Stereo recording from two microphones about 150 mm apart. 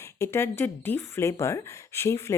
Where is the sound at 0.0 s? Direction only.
20° left (ahead or behind).